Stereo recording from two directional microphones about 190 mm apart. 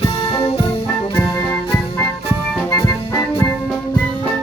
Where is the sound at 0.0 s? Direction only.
30° left (ahead or behind).